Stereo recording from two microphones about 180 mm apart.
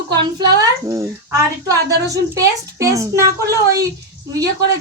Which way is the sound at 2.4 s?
20° right (ahead or behind).